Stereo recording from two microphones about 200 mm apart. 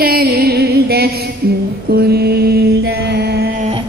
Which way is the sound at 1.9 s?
50° right (ahead or behind).